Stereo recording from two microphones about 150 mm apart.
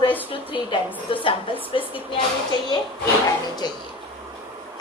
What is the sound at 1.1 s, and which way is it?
A woman's voice, 35° left (ahead or behind).